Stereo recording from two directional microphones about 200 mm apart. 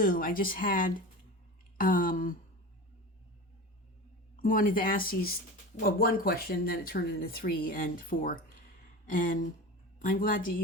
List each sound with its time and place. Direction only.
0.0 s speech: 45° left (ahead or behind)
4.4 s speech: 45° left (ahead or behind)